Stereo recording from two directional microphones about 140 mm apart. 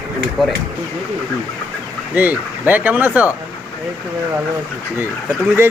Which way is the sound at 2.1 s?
10° right (ahead or behind).